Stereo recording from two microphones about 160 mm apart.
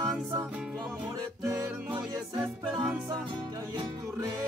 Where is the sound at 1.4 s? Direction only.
15° right (ahead or behind).